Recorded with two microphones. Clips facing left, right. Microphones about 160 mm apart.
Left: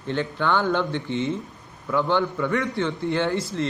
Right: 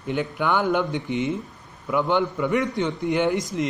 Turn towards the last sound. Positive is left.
turn(degrees=-15)  # may be behind; listen again after turning